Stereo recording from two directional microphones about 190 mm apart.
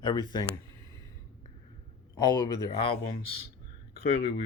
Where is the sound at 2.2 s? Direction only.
20° left (ahead or behind).